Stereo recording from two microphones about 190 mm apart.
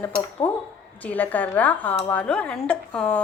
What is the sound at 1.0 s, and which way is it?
A woman's voice, 10° left (ahead or behind).